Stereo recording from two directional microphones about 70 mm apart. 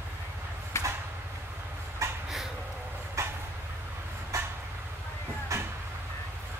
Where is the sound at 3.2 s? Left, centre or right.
Right.